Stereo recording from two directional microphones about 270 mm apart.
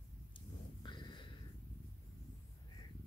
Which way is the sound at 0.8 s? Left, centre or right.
Centre.